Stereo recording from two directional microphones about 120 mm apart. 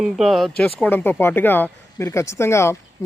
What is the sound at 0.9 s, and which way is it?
Speech, 15° left (ahead or behind).